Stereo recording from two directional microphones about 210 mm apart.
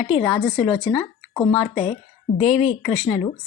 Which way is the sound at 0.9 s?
15° left (ahead or behind).